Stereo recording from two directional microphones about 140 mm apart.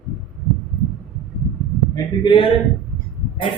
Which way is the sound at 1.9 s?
35° left (ahead or behind).